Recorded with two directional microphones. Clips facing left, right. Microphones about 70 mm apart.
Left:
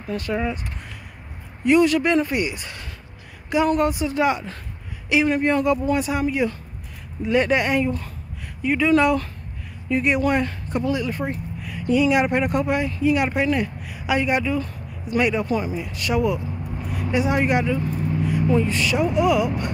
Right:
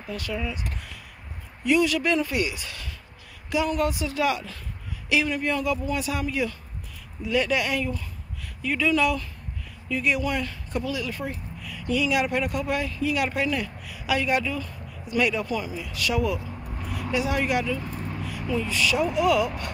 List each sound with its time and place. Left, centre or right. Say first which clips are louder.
0.1 s speech: left 6 dB; left
1.6 s speech: left 5 dB; left
8.9 s speech: left 6 dB; left
17.9 s vehicle: left 8 dB; centre
18.7 s speech: left 3 dB; left